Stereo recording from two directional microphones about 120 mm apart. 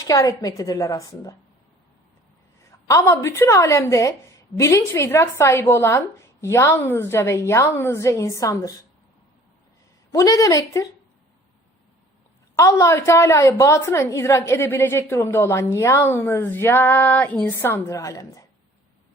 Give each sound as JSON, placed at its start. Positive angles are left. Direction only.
{"t": 0.1, "sound": "a woman's voice", "side_deg": 30}
{"t": 2.6, "sound": "a woman's voice", "side_deg": 25}
{"t": 10.1, "sound": "a woman's voice", "side_deg": 25}
{"t": 12.5, "sound": "a woman's voice", "side_deg": 25}